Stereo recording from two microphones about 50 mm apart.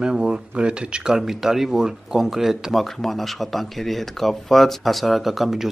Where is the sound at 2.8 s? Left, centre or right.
Centre.